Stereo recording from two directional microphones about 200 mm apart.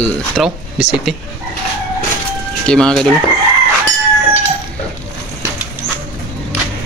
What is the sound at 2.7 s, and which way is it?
Speech, 5° left (ahead or behind).